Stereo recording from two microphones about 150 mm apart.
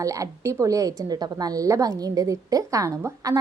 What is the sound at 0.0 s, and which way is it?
A woman's voice, 20° right (ahead or behind).